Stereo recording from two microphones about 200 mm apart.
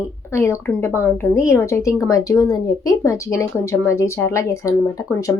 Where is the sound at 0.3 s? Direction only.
15° left (ahead or behind).